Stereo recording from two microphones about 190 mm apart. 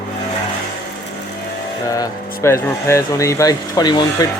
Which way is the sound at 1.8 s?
20° left (ahead or behind).